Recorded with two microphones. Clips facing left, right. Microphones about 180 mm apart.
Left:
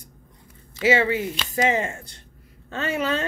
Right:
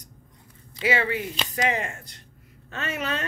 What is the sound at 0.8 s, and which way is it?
A woman's voice, 25° left (ahead or behind).